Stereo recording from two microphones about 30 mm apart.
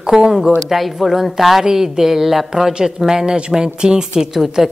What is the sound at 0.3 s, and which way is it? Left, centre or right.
A woman's voice, centre.